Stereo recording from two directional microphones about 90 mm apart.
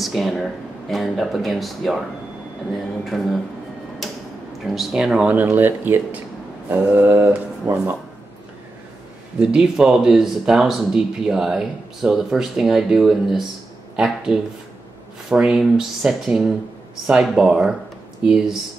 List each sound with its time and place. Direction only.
0.0 s speech: centre (ahead or behind)
3.1 s speech: centre (ahead or behind)
4.6 s speech: centre (ahead or behind)
5.3 s speech: 20° right (ahead or behind)
9.4 s speech: 5° right (ahead or behind)